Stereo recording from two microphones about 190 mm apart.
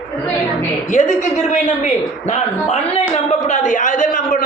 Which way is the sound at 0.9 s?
40° left (ahead or behind).